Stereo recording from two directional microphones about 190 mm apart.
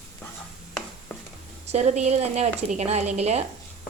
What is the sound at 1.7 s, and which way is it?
A woman's voice, 35° right (ahead or behind).